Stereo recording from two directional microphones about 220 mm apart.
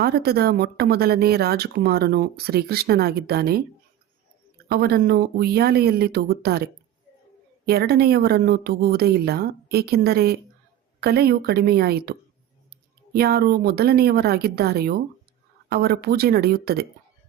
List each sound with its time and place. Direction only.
0.0 s speech: 45° right (ahead or behind)
4.7 s speech: 45° right (ahead or behind)
7.7 s speech: 45° right (ahead or behind)
13.1 s speech: 45° right (ahead or behind)